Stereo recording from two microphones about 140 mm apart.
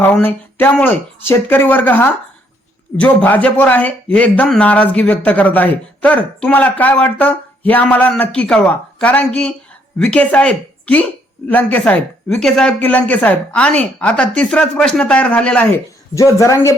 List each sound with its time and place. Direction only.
0.0 s a man's voice: 15° left (ahead or behind)
16.1 s speech: 20° left (ahead or behind)